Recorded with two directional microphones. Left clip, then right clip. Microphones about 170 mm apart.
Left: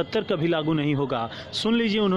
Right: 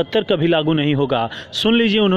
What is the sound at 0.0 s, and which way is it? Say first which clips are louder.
A man's voice: right 7 dB; 30° right (ahead or behind).